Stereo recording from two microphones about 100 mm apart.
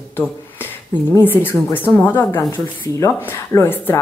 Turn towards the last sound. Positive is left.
turn(degrees=25)  # may be behind; listen again after turning